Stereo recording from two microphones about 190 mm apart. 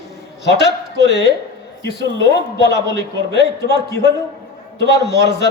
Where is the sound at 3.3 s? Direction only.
60° left (ahead or behind).